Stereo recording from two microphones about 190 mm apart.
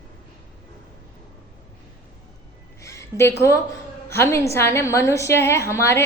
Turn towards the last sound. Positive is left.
turn(degrees=15)  # may be behind; listen again after turning